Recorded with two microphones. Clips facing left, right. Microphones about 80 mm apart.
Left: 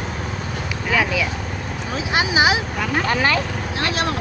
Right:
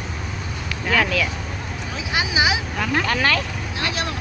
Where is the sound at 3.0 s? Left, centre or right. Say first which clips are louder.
Left 4 dB; left.